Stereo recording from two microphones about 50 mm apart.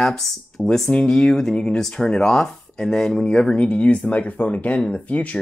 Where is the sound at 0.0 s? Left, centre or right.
Centre.